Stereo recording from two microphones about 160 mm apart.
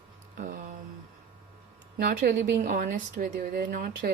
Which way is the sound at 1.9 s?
70° right (ahead or behind).